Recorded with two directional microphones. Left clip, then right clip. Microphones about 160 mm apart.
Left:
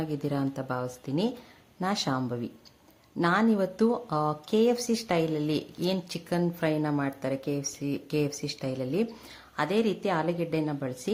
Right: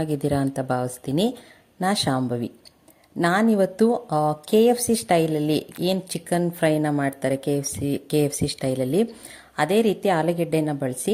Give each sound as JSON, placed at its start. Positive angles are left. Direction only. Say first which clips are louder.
{"t": 0.0, "sound": "speech", "louder": "right 7 dB", "side_deg": -30}